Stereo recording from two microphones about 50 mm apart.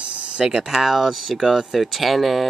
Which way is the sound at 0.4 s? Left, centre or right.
Centre.